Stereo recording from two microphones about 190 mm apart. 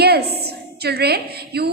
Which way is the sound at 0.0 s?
55° right (ahead or behind).